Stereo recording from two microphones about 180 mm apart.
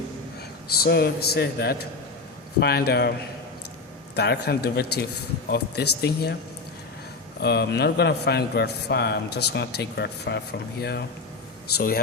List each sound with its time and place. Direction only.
0.8 s a man's voice: 60° left (ahead or behind)
4.1 s a man's voice: 65° left (ahead or behind)
7.4 s a man's voice: 65° left (ahead or behind)